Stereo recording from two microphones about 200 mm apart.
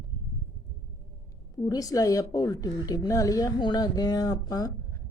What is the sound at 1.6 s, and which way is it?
A woman's voice, 20° left (ahead or behind).